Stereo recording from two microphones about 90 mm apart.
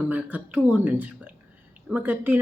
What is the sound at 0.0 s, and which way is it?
Speech, 20° right (ahead or behind).